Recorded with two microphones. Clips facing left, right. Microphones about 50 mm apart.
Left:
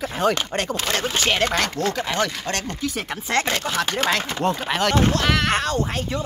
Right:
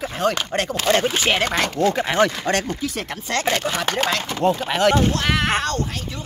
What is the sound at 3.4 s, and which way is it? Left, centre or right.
Speech, centre.